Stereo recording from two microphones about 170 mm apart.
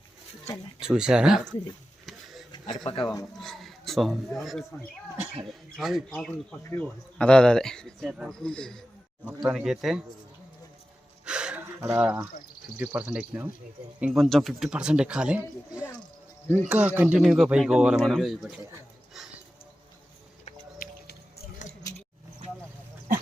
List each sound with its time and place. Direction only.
0.8 s speech: 5° right (ahead or behind)
2.8 s speech: 25° left (ahead or behind)
3.4 s a sound: centre (ahead or behind)
4.4 s speech: centre (ahead or behind)
11.3 s gasp: 5° right (ahead or behind)
11.8 s speech: 10° right (ahead or behind)
20.7 s music: 65° left (ahead or behind)